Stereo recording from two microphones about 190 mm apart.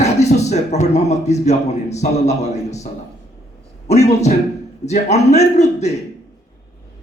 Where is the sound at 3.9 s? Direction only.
35° left (ahead or behind).